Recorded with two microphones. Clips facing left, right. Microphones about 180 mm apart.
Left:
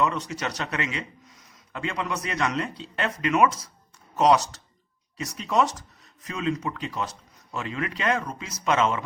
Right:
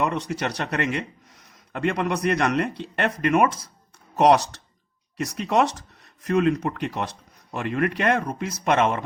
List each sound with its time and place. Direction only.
0.0 s a man's voice: 55° right (ahead or behind)
5.1 s a man's voice: 65° right (ahead or behind)